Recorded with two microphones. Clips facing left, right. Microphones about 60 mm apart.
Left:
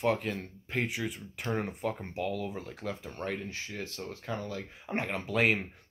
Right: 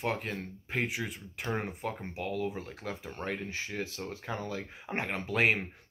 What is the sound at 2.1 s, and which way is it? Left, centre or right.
Speech, right.